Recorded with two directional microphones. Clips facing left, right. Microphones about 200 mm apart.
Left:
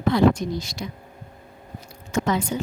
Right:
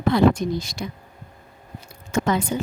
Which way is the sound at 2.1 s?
55° right (ahead or behind).